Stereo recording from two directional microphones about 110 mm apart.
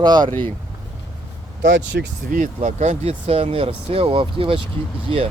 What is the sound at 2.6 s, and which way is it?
Speech, 90° right.